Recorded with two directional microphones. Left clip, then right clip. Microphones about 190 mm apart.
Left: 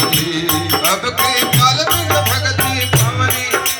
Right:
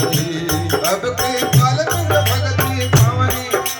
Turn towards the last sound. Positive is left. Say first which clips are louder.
# left 4 dB
turn(degrees=-60)  # may be behind; listen again after turning